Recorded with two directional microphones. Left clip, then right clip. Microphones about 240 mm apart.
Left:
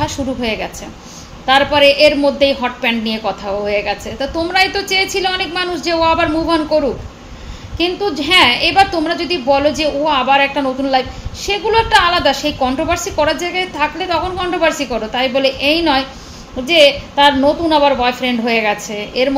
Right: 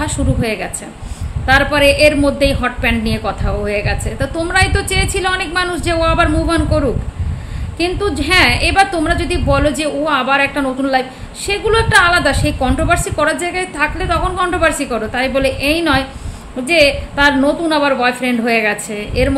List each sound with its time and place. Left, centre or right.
0.0 s a woman's voice: centre